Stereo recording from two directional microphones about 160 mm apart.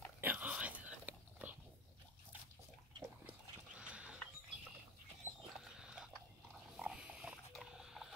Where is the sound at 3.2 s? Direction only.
10° right (ahead or behind).